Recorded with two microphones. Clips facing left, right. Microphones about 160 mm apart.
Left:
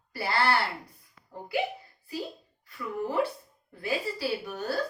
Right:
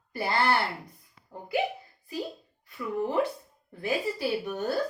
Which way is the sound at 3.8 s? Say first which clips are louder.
Right 2 dB; 20° right (ahead or behind).